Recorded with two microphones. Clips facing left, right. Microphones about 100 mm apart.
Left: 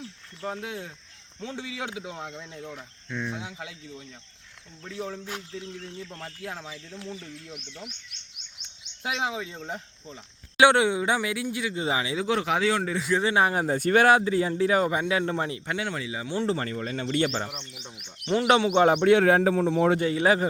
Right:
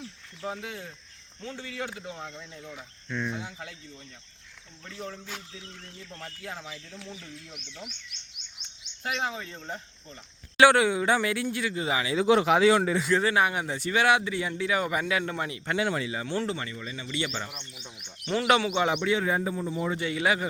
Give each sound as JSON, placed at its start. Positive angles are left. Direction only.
{"t": 0.4, "sound": "speech", "side_deg": 0}
{"t": 9.0, "sound": "speech", "side_deg": 10}
{"t": 10.6, "sound": "speech", "side_deg": 20}
{"t": 11.8, "sound": "speech", "side_deg": 25}
{"t": 12.2, "sound": "speech", "side_deg": -10}
{"t": 13.2, "sound": "speech", "side_deg": 30}
{"t": 15.7, "sound": "speech", "side_deg": -5}
{"t": 16.5, "sound": "speech", "side_deg": 45}
{"t": 18.3, "sound": "speech", "side_deg": 30}
{"t": 18.8, "sound": "speech", "side_deg": 45}
{"t": 19.1, "sound": "a man's voice", "side_deg": 75}
{"t": 20.0, "sound": "speech", "side_deg": 40}